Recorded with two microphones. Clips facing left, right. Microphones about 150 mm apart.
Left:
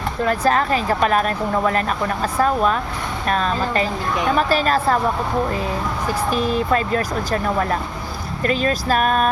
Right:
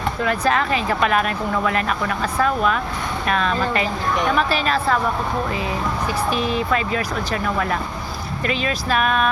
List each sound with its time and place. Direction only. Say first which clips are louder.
0.3 s a woman's voice: left 3 dB; 40° left (ahead or behind)
6.3 s speech: left 4 dB; 40° left (ahead or behind)